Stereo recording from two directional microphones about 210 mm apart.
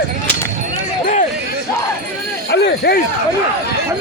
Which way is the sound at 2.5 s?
50° left (ahead or behind).